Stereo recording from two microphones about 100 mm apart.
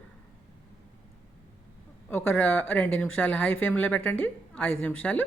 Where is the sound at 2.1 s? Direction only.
20° left (ahead or behind).